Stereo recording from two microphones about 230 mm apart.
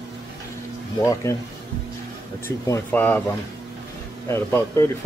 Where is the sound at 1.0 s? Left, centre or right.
Centre.